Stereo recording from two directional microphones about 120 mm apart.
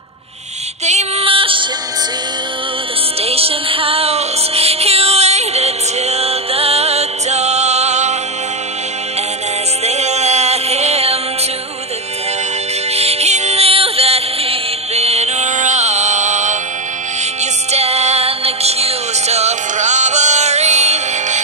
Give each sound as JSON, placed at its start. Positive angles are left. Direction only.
{"t": 1.2, "sound": "music", "side_deg": -50}
{"t": 3.2, "sound": "music", "side_deg": -55}
{"t": 9.8, "sound": "music", "side_deg": -65}
{"t": 12.9, "sound": "music", "side_deg": -60}
{"t": 17.4, "sound": "music", "side_deg": -65}